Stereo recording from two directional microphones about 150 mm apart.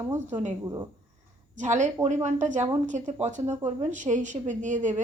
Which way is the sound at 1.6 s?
50° right (ahead or behind).